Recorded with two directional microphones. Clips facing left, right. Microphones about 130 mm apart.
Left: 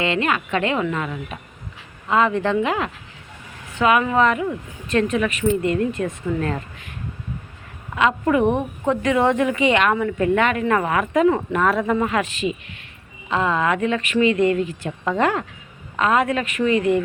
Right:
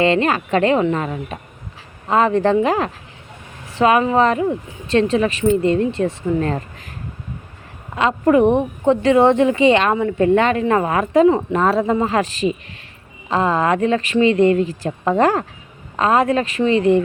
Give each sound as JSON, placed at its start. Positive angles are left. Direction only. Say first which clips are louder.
{"t": 0.0, "sound": "speech", "louder": "right 5 dB", "side_deg": -35}
{"t": 7.9, "sound": "speech", "louder": "right 4 dB", "side_deg": -35}